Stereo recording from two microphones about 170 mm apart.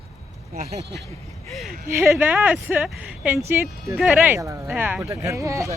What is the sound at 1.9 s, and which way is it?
Speech, 15° right (ahead or behind).